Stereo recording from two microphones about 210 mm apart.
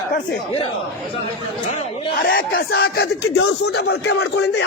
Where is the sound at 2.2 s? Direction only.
45° left (ahead or behind).